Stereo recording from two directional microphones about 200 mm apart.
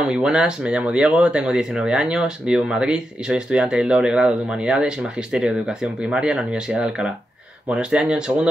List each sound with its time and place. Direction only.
0.0 s speech: 5° right (ahead or behind)